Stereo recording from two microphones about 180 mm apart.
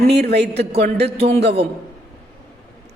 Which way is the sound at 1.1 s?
35° right (ahead or behind).